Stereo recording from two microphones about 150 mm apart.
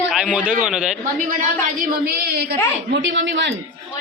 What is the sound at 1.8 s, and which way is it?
Speech, 80° right.